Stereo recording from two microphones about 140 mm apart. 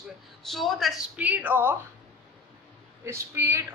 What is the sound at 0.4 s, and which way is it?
Speech, centre (ahead or behind).